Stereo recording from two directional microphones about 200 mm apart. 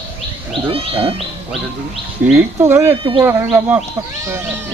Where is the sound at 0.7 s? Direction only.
25° right (ahead or behind).